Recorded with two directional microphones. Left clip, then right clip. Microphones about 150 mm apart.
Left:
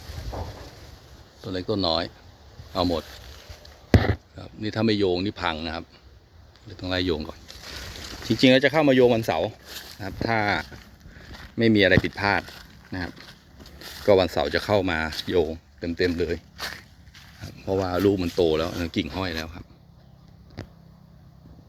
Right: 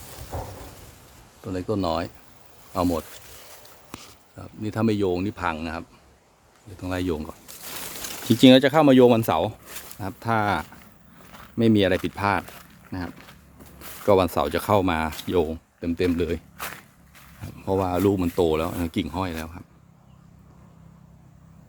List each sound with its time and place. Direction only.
0.3 s a sound: 50° right (ahead or behind)
1.5 s speech: 10° right (ahead or behind)
4.4 s speech: 10° right (ahead or behind)
8.3 s speech: 40° right (ahead or behind)
9.6 s a sound: 60° left (ahead or behind)
10.0 s speech: 30° right (ahead or behind)
12.4 s speech: 70° left (ahead or behind)
12.9 s speech: 15° right (ahead or behind)
14.0 s speech: 25° right (ahead or behind)
17.7 s speech: 25° right (ahead or behind); by 19.6 s 5° right (ahead or behind)